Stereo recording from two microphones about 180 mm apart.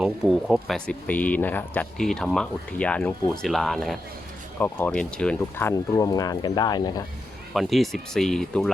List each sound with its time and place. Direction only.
0.0 s speech: 5° right (ahead or behind); by 7.0 s 20° left (ahead or behind)
7.5 s speech: centre (ahead or behind)